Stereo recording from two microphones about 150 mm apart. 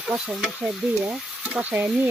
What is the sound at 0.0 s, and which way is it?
Speech, centre (ahead or behind).